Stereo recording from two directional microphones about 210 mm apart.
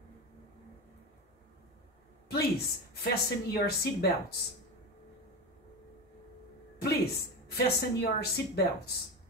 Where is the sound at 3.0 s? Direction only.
50° left (ahead or behind).